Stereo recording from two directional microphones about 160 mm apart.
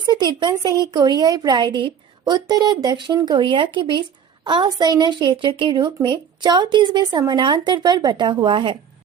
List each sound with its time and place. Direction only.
0.0 s a woman's voice: 25° right (ahead or behind)